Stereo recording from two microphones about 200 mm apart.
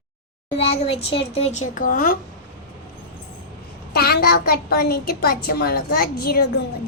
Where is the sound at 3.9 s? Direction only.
50° left (ahead or behind).